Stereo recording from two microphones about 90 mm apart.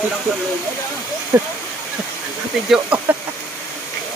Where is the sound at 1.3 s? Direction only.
25° right (ahead or behind).